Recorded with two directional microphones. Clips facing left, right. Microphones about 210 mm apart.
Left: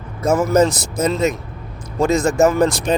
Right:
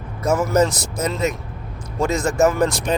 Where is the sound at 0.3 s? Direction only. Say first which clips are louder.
Left 3 dB; 25° left (ahead or behind).